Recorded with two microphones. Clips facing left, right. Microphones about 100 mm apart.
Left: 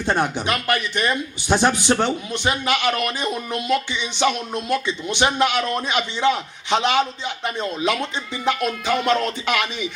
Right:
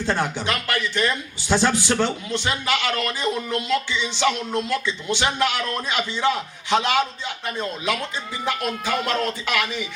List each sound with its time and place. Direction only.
0.1 s a man's voice: 20° left (ahead or behind)